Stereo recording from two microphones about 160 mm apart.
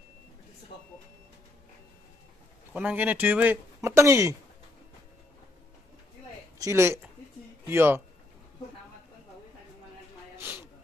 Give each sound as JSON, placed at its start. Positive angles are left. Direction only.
{"t": 2.7, "sound": "speech", "side_deg": -10}
{"t": 6.6, "sound": "speech", "side_deg": -15}
{"t": 10.3, "sound": "a sound", "side_deg": -10}